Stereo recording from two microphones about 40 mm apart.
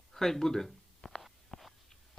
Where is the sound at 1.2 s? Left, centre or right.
Centre.